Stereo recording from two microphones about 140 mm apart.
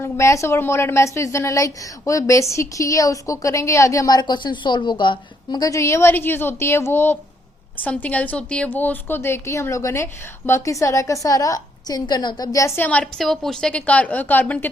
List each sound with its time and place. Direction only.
0.0 s a woman's voice: 20° left (ahead or behind)